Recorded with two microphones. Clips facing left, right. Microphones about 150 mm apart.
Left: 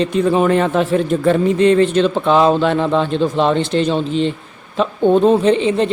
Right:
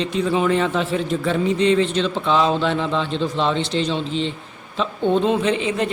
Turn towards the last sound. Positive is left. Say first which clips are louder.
# left 6 dB
turn(degrees=30)  # may be behind; listen again after turning